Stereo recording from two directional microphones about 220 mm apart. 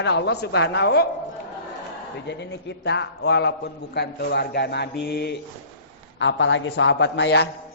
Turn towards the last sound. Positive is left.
turn(degrees=50)  # may be behind; listen again after turning